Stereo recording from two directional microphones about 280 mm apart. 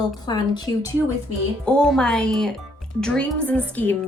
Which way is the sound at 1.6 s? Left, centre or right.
Centre.